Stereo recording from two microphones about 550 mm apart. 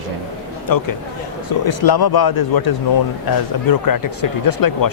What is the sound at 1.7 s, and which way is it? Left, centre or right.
Speech, left.